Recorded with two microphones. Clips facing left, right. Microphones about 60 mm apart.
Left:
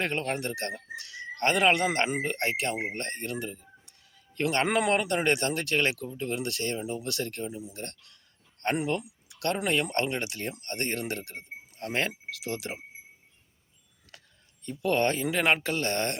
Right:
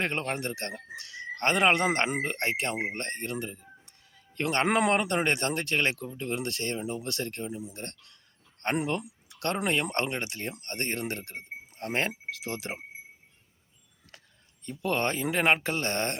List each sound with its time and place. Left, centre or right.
0.0 s speech: right
14.7 s speech: right